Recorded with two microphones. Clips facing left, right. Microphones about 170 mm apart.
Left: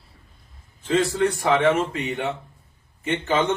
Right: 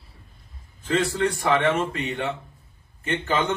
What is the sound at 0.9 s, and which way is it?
Speech, 15° left (ahead or behind).